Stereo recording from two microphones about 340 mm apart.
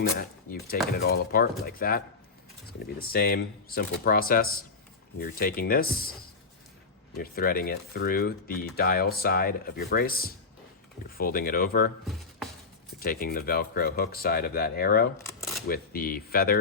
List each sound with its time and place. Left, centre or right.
0.7 s speech: left
13.0 s speech: left
15.3 s a sound: centre
15.6 s speech: left